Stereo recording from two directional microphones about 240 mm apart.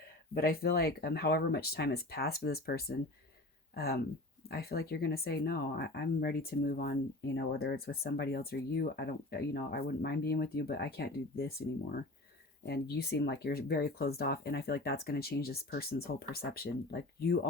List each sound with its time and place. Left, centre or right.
0.3 s speech: left